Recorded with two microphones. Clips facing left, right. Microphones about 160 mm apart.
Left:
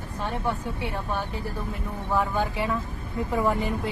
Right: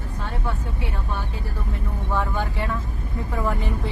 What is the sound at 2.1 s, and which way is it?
Speech, 15° left (ahead or behind).